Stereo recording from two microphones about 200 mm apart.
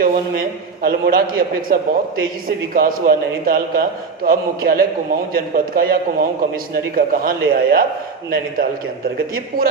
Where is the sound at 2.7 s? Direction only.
45° right (ahead or behind).